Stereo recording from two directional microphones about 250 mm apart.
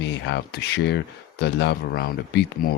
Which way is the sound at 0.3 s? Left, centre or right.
Left.